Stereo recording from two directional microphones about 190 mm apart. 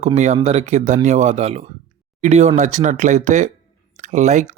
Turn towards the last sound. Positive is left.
turn(degrees=-40)  # may be behind; listen again after turning